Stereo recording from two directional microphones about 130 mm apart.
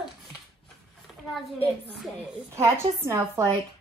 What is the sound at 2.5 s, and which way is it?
A woman's voice, 20° right (ahead or behind).